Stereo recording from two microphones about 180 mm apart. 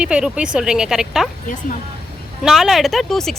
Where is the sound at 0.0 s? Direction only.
5° right (ahead or behind).